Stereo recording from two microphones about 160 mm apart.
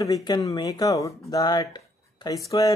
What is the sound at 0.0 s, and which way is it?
Speech, 25° left (ahead or behind).